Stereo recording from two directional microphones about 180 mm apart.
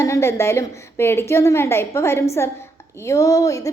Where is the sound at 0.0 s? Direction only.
15° left (ahead or behind).